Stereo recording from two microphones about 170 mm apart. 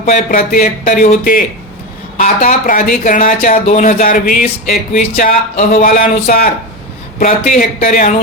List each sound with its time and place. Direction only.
0.0 s speech: 50° left (ahead or behind)